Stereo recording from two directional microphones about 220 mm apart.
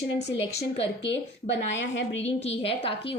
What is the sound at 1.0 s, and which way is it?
Speech, 55° left (ahead or behind).